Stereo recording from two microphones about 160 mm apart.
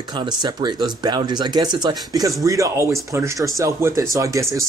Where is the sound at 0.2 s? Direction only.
30° right (ahead or behind).